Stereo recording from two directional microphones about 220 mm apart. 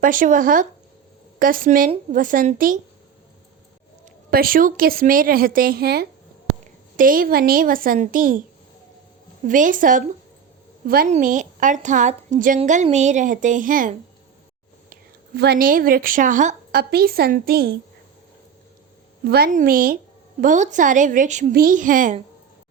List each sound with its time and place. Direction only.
0.0 s a woman's voice: 35° right (ahead or behind)
4.3 s a woman's voice: 40° right (ahead or behind)
9.4 s a woman's voice: 35° right (ahead or behind)
15.4 s a woman's voice: 45° right (ahead or behind)
19.2 s a woman's voice: 45° right (ahead or behind)